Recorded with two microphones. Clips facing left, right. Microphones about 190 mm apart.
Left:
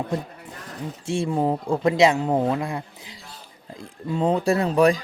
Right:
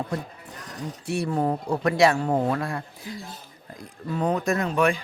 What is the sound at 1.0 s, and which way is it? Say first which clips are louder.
Speech: left 2 dB; 25° left (ahead or behind).